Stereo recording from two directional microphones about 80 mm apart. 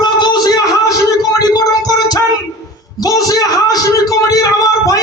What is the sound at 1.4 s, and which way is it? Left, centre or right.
Speech, left.